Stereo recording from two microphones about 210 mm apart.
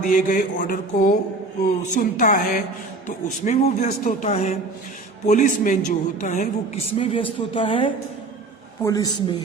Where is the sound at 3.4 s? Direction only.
35° left (ahead or behind); by 9.3 s 20° left (ahead or behind).